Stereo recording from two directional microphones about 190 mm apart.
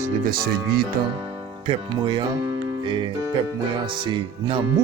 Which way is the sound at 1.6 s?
25° right (ahead or behind).